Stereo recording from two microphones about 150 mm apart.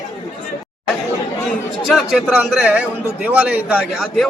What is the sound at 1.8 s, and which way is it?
A man's voice, 5° right (ahead or behind).